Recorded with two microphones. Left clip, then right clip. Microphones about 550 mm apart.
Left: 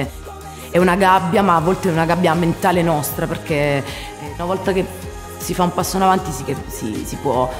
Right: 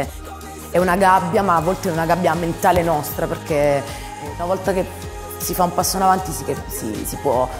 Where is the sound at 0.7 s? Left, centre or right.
Left.